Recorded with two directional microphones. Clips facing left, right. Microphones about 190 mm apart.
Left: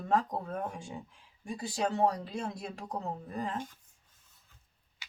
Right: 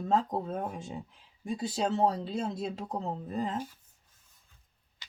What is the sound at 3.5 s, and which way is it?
Speech, 10° right (ahead or behind).